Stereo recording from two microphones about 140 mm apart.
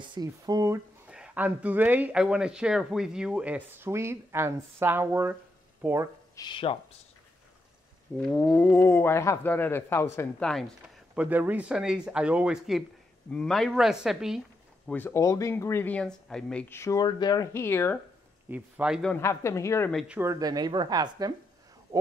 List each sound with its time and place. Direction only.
0.0 s speech: 30° right (ahead or behind)
1.1 s speech: 10° right (ahead or behind)
6.3 s speech: 35° left (ahead or behind)
8.2 s speech: 5° left (ahead or behind)
11.1 s a woman's voice: 10° right (ahead or behind)
14.9 s speech: 15° left (ahead or behind)
16.6 s speech: 20° left (ahead or behind)
18.5 s speech: 10° right (ahead or behind)
19.1 s speech: 20° left (ahead or behind)
20.1 s speech: 20° right (ahead or behind)